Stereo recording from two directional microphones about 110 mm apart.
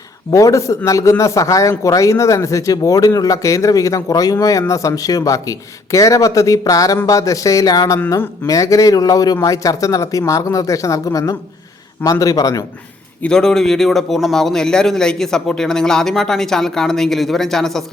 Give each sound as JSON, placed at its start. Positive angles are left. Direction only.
{"t": 0.3, "sound": "a man's voice", "side_deg": 30}
{"t": 13.2, "sound": "a man's voice", "side_deg": 5}